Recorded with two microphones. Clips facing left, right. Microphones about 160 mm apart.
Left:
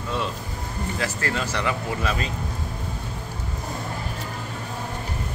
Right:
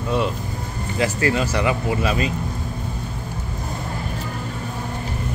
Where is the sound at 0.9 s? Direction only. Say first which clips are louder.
Right 8 dB; 15° right (ahead or behind).